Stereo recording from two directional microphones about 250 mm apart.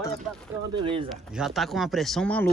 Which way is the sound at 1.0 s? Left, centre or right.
Centre.